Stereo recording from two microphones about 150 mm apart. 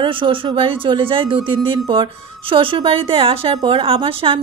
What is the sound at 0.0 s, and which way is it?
A woman's voice, 35° right (ahead or behind).